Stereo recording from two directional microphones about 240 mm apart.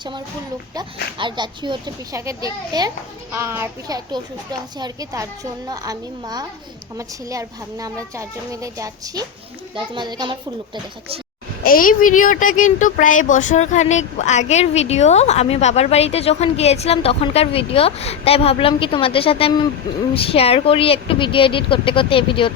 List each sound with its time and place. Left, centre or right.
1.2 s a child's voice: centre
11.6 s speech: left